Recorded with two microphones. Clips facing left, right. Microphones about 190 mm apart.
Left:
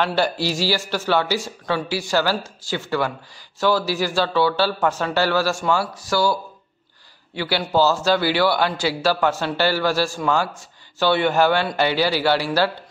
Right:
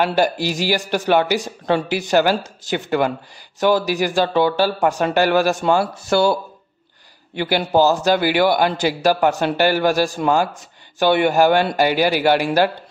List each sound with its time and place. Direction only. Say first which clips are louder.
0.0 s speech: right 3 dB; 15° right (ahead or behind)
7.3 s speech: right 4 dB; 50° right (ahead or behind)
7.7 s speech: right 2 dB; 15° right (ahead or behind)